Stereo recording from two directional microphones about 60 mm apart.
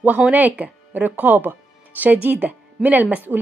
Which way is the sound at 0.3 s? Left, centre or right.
Right.